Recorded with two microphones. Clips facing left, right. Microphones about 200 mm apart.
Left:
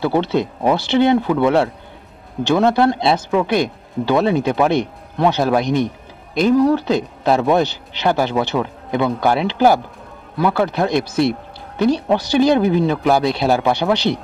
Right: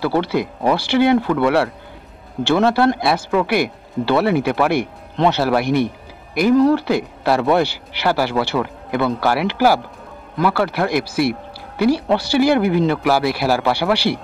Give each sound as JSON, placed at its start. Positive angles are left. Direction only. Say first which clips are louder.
{"t": 0.0, "sound": "speech", "louder": "left 1 dB", "side_deg": 20}